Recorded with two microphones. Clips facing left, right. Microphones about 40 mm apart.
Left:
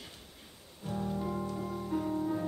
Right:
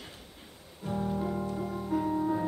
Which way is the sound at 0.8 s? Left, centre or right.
Centre.